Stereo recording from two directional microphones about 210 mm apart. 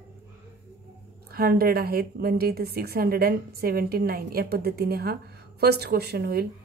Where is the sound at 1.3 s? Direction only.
45° right (ahead or behind).